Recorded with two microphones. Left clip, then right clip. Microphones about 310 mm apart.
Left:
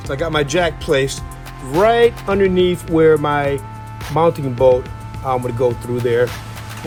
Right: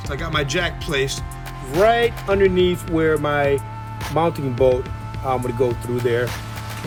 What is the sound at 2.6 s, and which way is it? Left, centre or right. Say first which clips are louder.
Speech: left 6 dB; centre.